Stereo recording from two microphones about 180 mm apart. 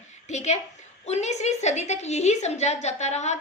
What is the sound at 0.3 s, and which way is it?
A woman's voice, 40° left (ahead or behind).